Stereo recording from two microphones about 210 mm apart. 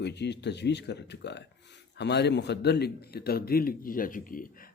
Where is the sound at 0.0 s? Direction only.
55° left (ahead or behind).